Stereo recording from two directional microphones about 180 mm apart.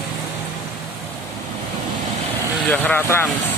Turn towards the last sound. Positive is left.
turn(degrees=15)  # may be behind; listen again after turning